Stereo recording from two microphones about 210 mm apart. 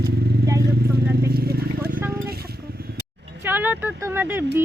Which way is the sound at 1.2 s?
50° right (ahead or behind).